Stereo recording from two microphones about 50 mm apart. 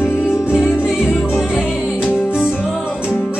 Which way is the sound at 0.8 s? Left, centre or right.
Centre.